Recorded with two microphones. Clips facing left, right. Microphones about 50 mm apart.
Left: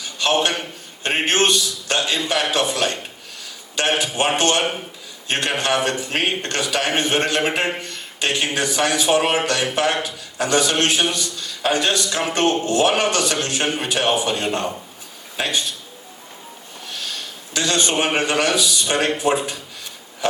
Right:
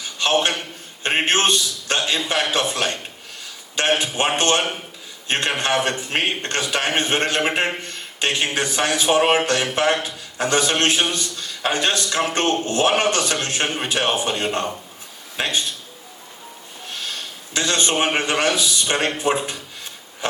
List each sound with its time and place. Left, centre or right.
0.2 s a man's voice: right
17.5 s a man's voice: right
19.2 s a sound: right